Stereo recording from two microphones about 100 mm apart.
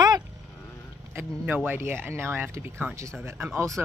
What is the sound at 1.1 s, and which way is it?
Speech, 20° right (ahead or behind).